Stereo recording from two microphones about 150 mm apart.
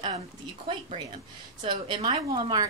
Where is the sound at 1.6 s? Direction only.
35° right (ahead or behind).